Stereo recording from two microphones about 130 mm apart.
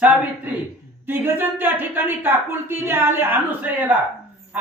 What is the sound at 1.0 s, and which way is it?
Speech, 15° right (ahead or behind).